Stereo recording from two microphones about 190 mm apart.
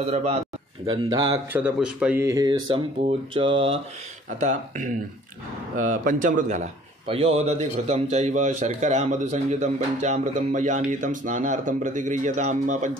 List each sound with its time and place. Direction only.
0.0 s a man's voice: 35° right (ahead or behind)
0.8 s speech: 25° right (ahead or behind)
1.5 s speech: 5° right (ahead or behind); by 3.8 s 30° right (ahead or behind)
4.4 s a man's voice: 40° right (ahead or behind)